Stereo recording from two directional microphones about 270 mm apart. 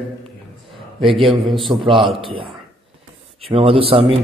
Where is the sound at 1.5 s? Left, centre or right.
Centre.